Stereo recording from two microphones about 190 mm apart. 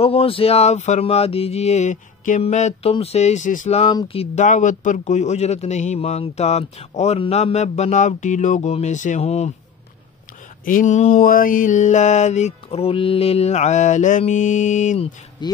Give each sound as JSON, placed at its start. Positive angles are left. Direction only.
{"t": 0.0, "sound": "mantra", "side_deg": 30}
{"t": 10.6, "sound": "mantra", "side_deg": 45}
{"t": 15.4, "sound": "speech", "side_deg": 25}